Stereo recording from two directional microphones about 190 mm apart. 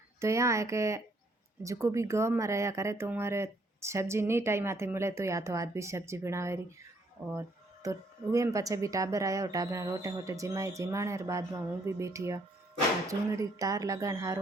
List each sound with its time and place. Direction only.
0.2 s speech: 15° right (ahead or behind)